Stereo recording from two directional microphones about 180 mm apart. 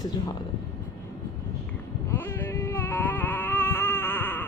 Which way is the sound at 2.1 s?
10° left (ahead or behind).